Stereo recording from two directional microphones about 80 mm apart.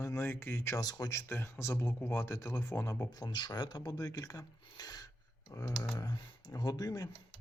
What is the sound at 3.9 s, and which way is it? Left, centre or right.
Speech, left.